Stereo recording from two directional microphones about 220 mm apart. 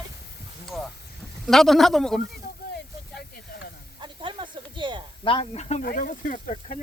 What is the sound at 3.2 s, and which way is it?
Snake, 45° left (ahead or behind).